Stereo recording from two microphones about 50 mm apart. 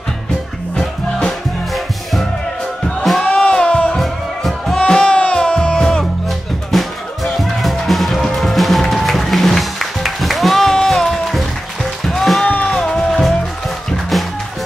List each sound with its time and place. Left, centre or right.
3.1 s a sound: centre
3.4 s music: left
4.0 s music: centre
4.7 s music: centre
6.7 s music: centre
12.6 s music: centre